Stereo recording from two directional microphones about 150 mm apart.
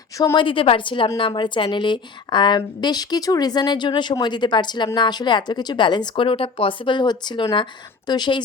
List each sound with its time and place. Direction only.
0.3 s a woman's voice: 35° left (ahead or behind)